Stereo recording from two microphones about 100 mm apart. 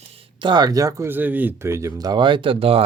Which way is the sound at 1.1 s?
15° right (ahead or behind).